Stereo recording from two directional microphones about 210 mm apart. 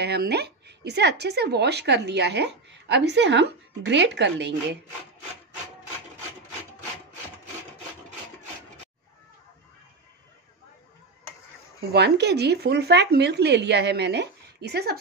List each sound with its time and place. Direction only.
0.0 s speech: 50° right (ahead or behind)
11.9 s speech: 55° right (ahead or behind)